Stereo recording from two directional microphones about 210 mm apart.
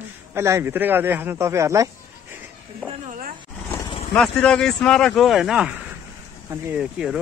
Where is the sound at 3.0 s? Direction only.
40° right (ahead or behind).